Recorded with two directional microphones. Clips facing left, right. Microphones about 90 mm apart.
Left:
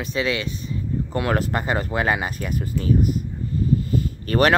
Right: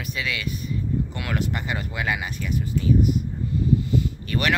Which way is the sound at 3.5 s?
40° left (ahead or behind).